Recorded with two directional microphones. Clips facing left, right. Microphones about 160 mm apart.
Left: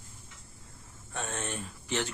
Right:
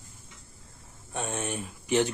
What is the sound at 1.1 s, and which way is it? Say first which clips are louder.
Speech: right 4 dB; 15° right (ahead or behind).